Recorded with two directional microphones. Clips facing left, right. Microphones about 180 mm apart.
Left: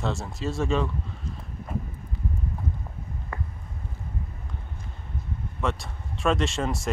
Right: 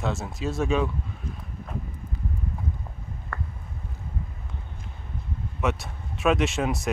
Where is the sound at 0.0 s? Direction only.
Centre (ahead or behind).